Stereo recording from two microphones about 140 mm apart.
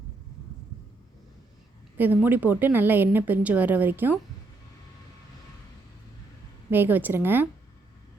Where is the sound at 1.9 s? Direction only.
15° right (ahead or behind).